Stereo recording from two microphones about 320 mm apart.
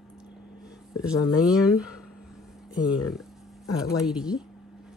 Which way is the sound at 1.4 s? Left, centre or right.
Centre.